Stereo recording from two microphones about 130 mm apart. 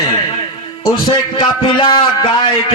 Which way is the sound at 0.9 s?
40° left (ahead or behind).